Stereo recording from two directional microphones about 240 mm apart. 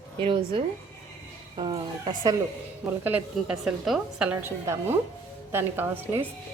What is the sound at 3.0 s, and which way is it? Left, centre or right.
A woman's voice, centre.